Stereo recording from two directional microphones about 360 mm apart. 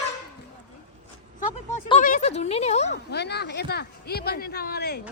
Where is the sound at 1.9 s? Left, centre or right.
Centre.